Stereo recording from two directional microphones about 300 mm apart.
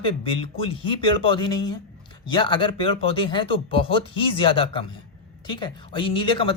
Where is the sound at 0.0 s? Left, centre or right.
Centre.